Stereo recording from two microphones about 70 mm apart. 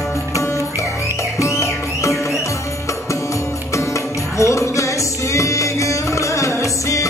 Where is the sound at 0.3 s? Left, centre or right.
Left.